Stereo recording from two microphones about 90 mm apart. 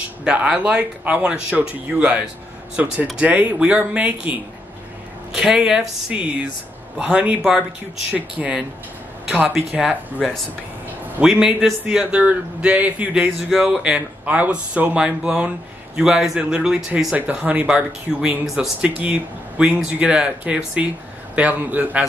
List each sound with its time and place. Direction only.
0.2 s a man's voice: 10° right (ahead or behind)
11.2 s a man's voice: 5° right (ahead or behind)
13.5 s speech: 5° right (ahead or behind)
13.9 s a man's voice: 15° right (ahead or behind)
19.6 s a man's voice: 15° right (ahead or behind)